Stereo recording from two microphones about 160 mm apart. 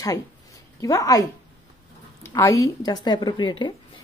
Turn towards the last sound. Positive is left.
turn(degrees=30)  # may be behind; listen again after turning